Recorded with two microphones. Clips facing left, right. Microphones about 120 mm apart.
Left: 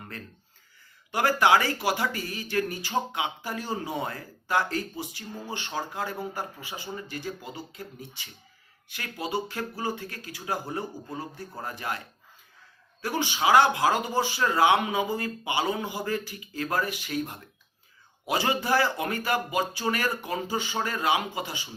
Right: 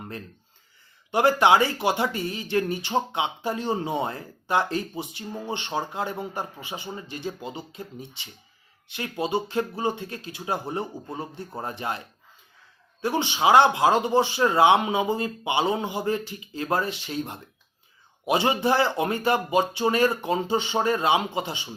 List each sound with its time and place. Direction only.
1.1 s speech: 25° right (ahead or behind)